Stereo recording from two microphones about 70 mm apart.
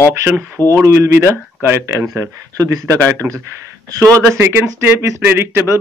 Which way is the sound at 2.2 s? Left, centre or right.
Right.